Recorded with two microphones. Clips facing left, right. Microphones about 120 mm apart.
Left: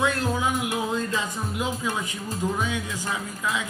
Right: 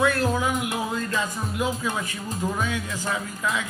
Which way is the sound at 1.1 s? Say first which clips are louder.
Right 1 dB; 15° left (ahead or behind).